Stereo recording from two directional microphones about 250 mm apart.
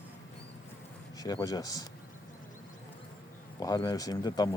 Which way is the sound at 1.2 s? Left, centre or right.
Centre.